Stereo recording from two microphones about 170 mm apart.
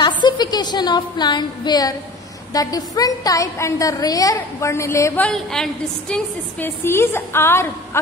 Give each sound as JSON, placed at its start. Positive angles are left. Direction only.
{"t": 0.0, "sound": "a woman's voice", "side_deg": 25}